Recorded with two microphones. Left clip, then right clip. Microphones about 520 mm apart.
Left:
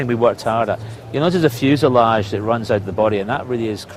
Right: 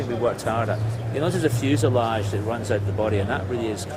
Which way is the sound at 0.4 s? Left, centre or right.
Left.